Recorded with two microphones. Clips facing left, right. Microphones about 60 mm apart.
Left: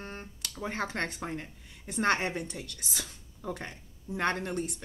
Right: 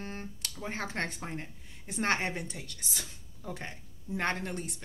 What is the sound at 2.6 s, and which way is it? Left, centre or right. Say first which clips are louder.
Speech: left 2 dB; left.